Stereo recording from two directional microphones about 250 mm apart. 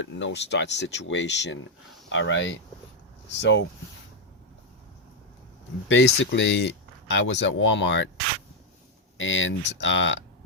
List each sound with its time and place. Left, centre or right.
0.0 s speech: left
5.9 s speech: left
9.1 s speech: left